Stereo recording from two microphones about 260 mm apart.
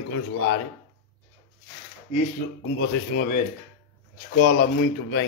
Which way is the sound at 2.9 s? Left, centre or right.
Left.